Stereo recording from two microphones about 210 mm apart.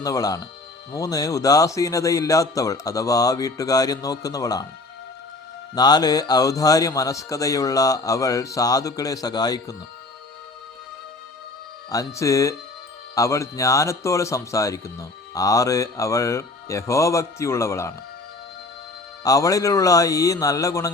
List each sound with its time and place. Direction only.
0.0 s speech: 15° left (ahead or behind)
5.7 s speech: 20° left (ahead or behind)
11.9 s speech: 15° left (ahead or behind)
19.2 s speech: 15° left (ahead or behind)